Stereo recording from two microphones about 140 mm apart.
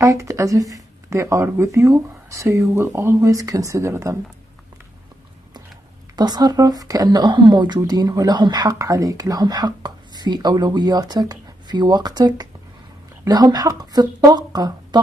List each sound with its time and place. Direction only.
0.0 s speech: 20° right (ahead or behind)
6.1 s speech: 30° right (ahead or behind)